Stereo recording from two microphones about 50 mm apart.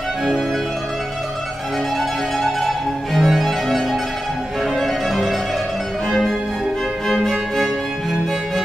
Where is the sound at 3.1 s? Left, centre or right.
Centre.